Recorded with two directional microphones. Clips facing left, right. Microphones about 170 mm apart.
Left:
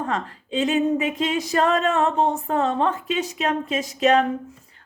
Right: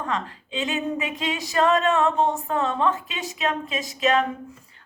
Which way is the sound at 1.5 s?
45° left (ahead or behind).